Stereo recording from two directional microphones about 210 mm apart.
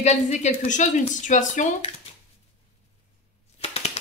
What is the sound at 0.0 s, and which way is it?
Speech, 35° left (ahead or behind).